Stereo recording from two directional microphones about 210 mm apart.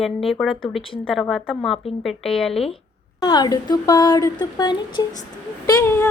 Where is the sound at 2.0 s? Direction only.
Centre (ahead or behind).